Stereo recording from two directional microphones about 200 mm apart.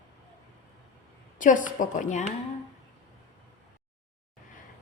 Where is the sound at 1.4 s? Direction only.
40° left (ahead or behind).